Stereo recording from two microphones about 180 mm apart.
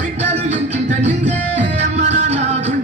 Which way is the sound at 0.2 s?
40° right (ahead or behind).